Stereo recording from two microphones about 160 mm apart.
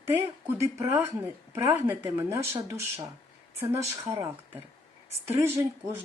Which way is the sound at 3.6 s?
20° right (ahead or behind).